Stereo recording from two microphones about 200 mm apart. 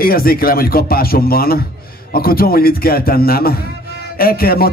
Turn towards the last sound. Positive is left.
turn(degrees=50)  # may be behind; listen again after turning